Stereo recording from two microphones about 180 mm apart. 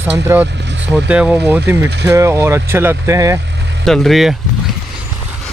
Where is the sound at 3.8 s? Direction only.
Centre (ahead or behind).